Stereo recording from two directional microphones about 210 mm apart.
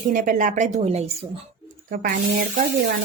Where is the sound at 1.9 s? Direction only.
45° right (ahead or behind).